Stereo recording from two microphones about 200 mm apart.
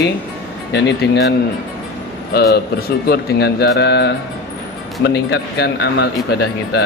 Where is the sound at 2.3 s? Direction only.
50° left (ahead or behind).